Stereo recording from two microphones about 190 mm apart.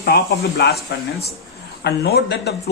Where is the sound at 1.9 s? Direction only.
60° left (ahead or behind).